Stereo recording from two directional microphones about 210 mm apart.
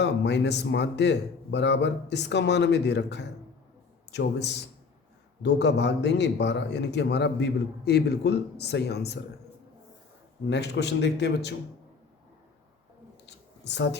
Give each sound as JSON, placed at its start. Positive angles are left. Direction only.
{"t": 0.0, "sound": "a man's voice", "side_deg": 55}
{"t": 10.5, "sound": "a man's voice", "side_deg": 55}
{"t": 13.2, "sound": "a sound", "side_deg": 55}